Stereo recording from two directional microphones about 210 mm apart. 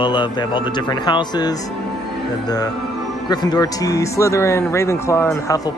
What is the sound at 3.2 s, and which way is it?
Speech, 20° left (ahead or behind).